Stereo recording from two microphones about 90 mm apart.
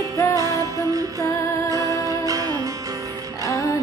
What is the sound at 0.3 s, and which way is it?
Music, 40° right (ahead or behind).